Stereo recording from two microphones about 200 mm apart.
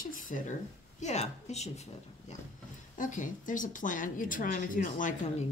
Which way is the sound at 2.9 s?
40° left (ahead or behind).